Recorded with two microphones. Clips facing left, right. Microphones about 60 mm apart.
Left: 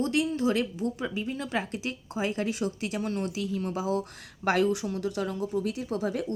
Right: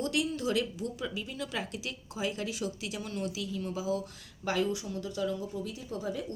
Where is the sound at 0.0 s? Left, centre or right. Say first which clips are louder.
Left 5 dB; left.